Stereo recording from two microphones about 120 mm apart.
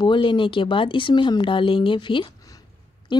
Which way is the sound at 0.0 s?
45° left (ahead or behind).